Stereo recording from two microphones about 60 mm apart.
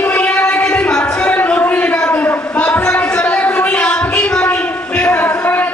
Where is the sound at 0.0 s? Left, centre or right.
Left.